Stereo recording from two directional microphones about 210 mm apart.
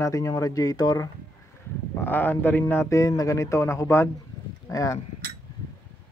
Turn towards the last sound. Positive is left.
turn(degrees=15)  # may be behind; listen again after turning